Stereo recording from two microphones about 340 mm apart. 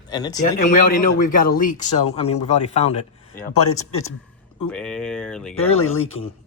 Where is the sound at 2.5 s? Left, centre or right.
Centre.